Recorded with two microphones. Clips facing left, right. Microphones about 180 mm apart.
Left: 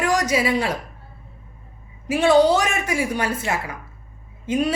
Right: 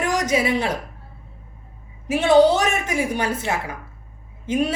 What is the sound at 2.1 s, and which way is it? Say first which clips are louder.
A woman's voice: right 1 dB; 20° right (ahead or behind).